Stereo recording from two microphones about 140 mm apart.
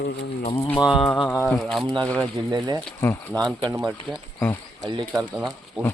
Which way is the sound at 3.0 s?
15° left (ahead or behind).